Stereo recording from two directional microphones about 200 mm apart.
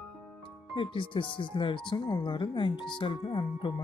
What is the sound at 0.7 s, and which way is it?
Speech, 25° left (ahead or behind).